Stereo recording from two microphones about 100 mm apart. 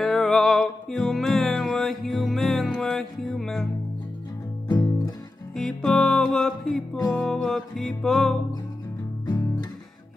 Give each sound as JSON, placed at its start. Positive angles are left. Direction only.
{"t": 0.0, "sound": "music", "side_deg": 5}
{"t": 4.6, "sound": "music", "side_deg": 40}
{"t": 5.5, "sound": "music", "side_deg": 5}
{"t": 9.2, "sound": "music", "side_deg": 45}